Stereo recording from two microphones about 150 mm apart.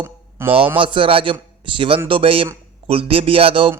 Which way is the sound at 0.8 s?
35° right (ahead or behind).